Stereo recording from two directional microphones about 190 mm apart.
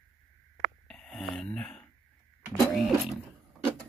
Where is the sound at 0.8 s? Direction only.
5° left (ahead or behind).